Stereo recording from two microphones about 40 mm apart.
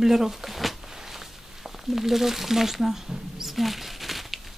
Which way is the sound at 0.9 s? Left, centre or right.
Centre.